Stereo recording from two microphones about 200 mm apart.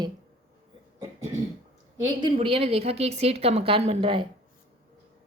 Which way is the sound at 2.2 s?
25° right (ahead or behind).